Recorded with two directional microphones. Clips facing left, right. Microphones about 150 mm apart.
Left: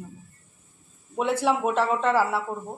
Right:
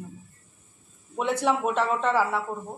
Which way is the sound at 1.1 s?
5° left (ahead or behind).